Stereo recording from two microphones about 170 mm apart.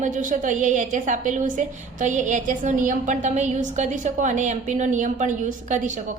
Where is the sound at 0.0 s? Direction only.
45° right (ahead or behind).